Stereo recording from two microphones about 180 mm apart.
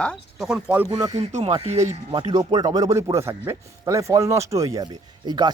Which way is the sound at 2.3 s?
20° right (ahead or behind).